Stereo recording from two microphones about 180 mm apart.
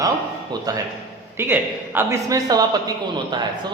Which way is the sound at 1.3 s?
10° right (ahead or behind).